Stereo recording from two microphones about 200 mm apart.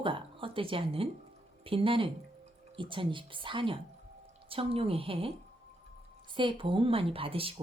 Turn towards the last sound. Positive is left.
turn(degrees=-25)  # may be behind; listen again after turning